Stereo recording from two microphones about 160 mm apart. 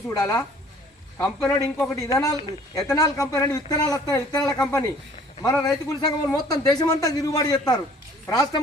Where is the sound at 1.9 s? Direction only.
20° left (ahead or behind).